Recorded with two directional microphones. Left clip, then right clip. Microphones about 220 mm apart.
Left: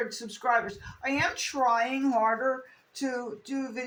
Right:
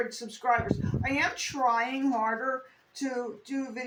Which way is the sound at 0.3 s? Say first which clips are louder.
Left 1 dB; 15° left (ahead or behind).